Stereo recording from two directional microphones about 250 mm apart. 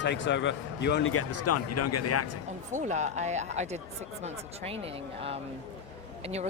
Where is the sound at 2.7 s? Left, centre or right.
Right.